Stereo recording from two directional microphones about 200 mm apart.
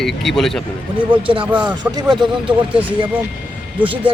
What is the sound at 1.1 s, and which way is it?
Speech, 25° right (ahead or behind).